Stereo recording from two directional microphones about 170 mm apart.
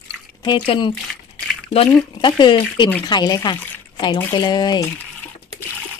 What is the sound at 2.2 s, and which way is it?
Speech, 30° left (ahead or behind).